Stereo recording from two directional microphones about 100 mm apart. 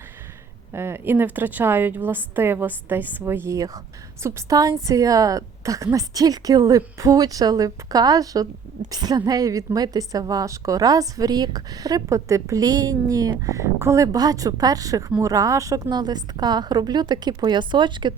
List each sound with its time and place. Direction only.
0.7 s a woman's voice: 25° right (ahead or behind); by 18.1 s 50° right (ahead or behind)